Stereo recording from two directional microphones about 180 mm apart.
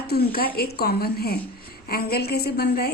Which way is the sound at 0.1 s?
60° left (ahead or behind).